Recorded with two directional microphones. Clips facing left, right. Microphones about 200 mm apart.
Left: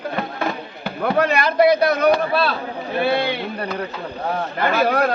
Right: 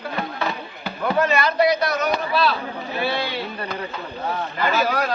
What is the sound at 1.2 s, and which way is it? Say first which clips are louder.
A man's voice: left 3 dB; 55° left (ahead or behind).